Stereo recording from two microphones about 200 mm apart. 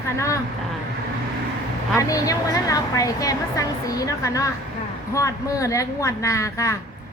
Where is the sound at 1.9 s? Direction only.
15° left (ahead or behind).